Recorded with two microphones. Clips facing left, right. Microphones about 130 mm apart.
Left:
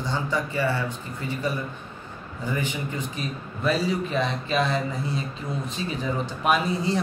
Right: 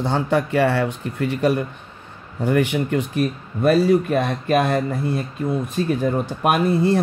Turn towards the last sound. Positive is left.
turn(degrees=-60)  # may be behind; listen again after turning